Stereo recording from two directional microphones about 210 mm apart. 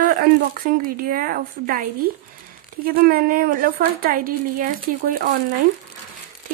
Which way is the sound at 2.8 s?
45° right (ahead or behind).